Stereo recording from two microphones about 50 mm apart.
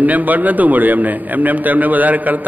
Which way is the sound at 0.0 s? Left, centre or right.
Right.